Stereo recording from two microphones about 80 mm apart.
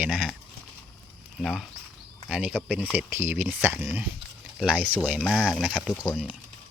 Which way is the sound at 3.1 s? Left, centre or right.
Right.